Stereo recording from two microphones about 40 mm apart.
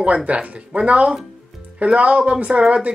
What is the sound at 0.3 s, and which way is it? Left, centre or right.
Speech, right.